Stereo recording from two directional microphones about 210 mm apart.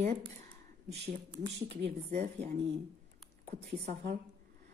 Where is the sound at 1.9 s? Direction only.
30° right (ahead or behind).